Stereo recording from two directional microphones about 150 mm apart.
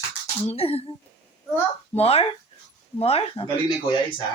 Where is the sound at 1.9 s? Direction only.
40° left (ahead or behind).